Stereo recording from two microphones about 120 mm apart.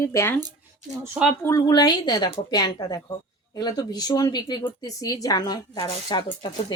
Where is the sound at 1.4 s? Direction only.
30° left (ahead or behind).